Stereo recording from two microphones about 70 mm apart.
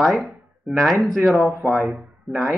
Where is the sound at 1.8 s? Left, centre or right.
Centre.